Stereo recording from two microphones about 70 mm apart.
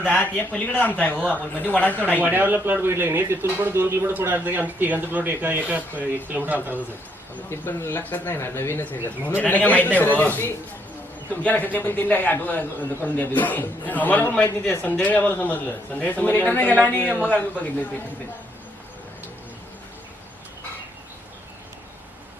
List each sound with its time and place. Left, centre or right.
0.6 s a man's voice: left
2.2 s speech: right
7.5 s speech: left
9.0 s a man's voice: left